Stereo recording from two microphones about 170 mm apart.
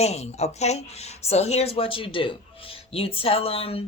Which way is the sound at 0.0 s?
40° left (ahead or behind).